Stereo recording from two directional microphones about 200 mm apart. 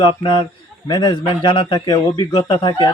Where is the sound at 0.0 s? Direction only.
20° left (ahead or behind).